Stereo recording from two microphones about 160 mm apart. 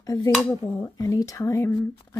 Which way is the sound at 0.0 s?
20° left (ahead or behind).